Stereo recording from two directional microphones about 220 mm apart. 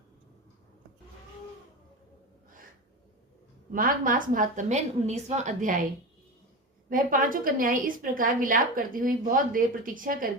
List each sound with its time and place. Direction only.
3.7 s a woman's voice: 40° right (ahead or behind)
6.9 s a woman's voice: 40° right (ahead or behind)